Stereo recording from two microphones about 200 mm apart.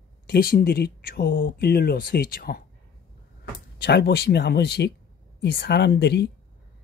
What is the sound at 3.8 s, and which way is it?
Speech, 55° left (ahead or behind).